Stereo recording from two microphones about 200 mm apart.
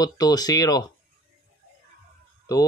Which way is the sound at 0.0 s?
20° left (ahead or behind).